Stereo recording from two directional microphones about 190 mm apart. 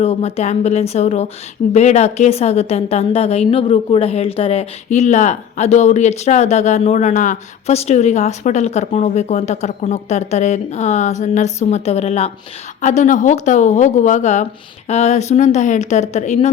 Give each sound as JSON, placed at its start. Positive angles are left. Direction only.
{"t": 0.0, "sound": "a woman's voice", "side_deg": 30}